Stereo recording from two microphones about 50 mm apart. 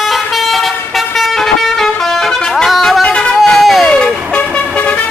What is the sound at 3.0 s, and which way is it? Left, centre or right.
Music, centre.